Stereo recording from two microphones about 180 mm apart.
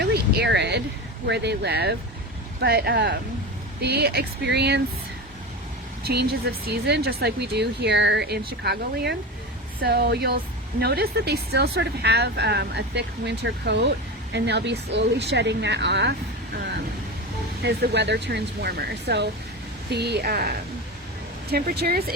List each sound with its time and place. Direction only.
0.0 s a sound: 65° right (ahead or behind)
1.3 s speech: 70° right (ahead or behind)
6.7 s speech: 65° right (ahead or behind)
17.6 s speech: 70° right (ahead or behind)